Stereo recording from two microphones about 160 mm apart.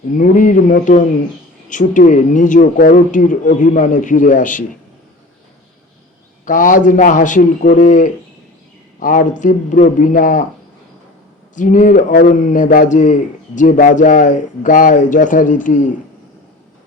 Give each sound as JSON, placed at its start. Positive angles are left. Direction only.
{"t": 0.2, "sound": "speech", "side_deg": 55}
{"t": 6.4, "sound": "a man's voice", "side_deg": 55}
{"t": 11.5, "sound": "speech", "side_deg": 55}
{"t": 12.4, "sound": "a man's voice", "side_deg": 50}